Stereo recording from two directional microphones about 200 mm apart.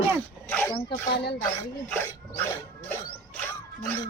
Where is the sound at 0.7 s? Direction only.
20° left (ahead or behind).